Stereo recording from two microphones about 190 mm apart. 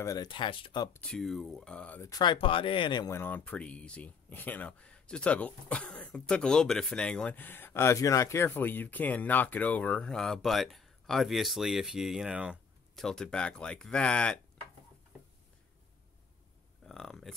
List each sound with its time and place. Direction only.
0.0 s speech: 20° left (ahead or behind)
0.9 s speech: 5° left (ahead or behind)
16.8 s a sound: centre (ahead or behind)